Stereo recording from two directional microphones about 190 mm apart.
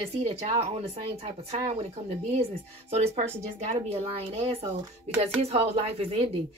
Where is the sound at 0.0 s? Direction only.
30° right (ahead or behind).